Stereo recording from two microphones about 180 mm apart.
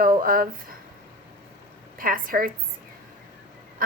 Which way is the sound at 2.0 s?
50° right (ahead or behind).